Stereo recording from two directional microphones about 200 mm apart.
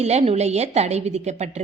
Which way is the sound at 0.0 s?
35° right (ahead or behind).